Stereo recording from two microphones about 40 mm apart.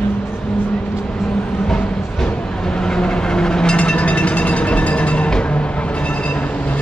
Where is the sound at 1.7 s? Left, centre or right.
Left.